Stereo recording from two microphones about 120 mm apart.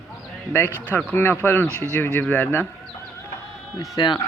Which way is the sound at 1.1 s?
20° left (ahead or behind).